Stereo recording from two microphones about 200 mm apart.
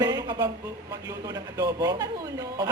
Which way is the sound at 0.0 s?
20° right (ahead or behind).